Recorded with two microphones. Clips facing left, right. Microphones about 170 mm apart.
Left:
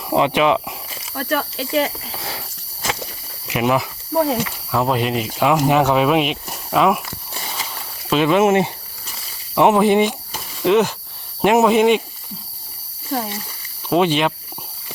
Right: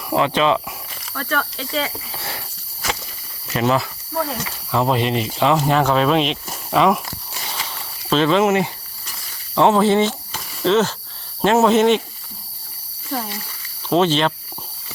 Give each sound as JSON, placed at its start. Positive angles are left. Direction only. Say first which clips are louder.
{"t": 0.1, "sound": "speech", "louder": "left 1 dB", "side_deg": 20}
{"t": 3.4, "sound": "speech", "louder": "even", "side_deg": 10}
{"t": 4.1, "sound": "speech", "louder": "left 7 dB", "side_deg": 20}
{"t": 4.7, "sound": "speech", "louder": "right 1 dB", "side_deg": 0}
{"t": 8.1, "sound": "speech", "louder": "left 1 dB", "side_deg": 15}
{"t": 13.1, "sound": "speech", "louder": "left 3 dB", "side_deg": 20}